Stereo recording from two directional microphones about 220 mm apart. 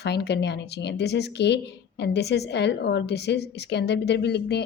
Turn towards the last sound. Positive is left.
turn(degrees=50)  # may be behind; listen again after turning